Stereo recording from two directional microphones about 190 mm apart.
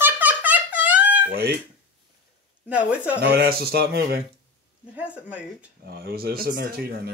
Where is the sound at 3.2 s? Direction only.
55° right (ahead or behind).